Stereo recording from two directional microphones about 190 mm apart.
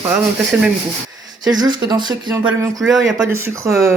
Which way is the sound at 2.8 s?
Centre (ahead or behind).